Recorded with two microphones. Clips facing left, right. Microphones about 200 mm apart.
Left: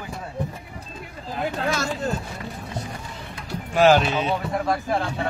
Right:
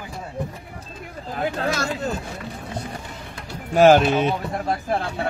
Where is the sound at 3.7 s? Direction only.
45° right (ahead or behind).